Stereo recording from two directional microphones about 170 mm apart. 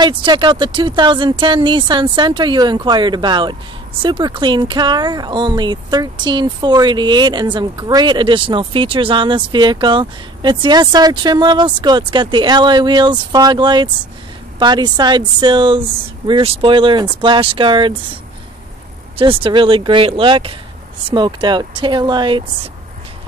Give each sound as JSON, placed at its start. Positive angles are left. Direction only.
{"t": 0.0, "sound": "speech", "side_deg": -25}